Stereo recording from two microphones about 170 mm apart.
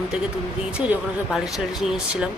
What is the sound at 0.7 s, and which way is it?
Speech, 5° right (ahead or behind).